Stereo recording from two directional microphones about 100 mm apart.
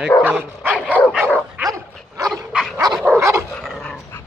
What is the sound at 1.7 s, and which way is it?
Dog, 35° right (ahead or behind).